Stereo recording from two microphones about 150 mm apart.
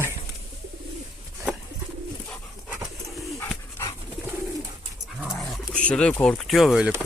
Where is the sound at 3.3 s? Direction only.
20° left (ahead or behind).